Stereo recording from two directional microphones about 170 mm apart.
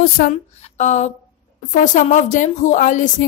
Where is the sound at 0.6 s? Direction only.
45° left (ahead or behind).